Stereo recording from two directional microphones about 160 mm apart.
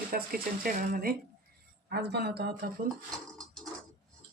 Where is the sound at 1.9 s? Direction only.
90° right.